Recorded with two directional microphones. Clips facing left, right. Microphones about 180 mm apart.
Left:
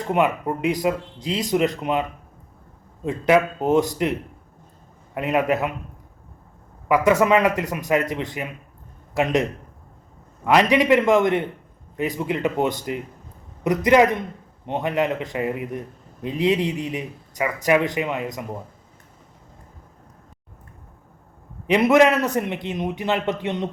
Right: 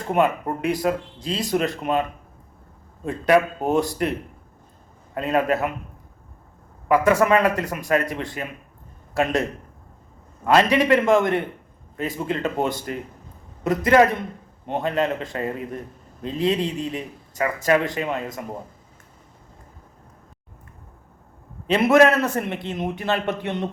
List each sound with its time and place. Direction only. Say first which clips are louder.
0.1 s a man's voice: even; 20° left (ahead or behind)
5.1 s a man's voice: even; 20° left (ahead or behind)
6.8 s a man's voice: even; 20° left (ahead or behind)
21.7 s a man's voice: even; 20° left (ahead or behind)